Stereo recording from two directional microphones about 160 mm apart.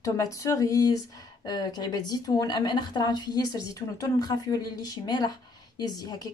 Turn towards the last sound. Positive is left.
turn(degrees=25)  # may be behind; listen again after turning